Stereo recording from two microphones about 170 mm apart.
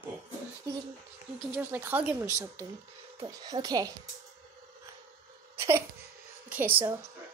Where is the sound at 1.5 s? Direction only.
10° right (ahead or behind).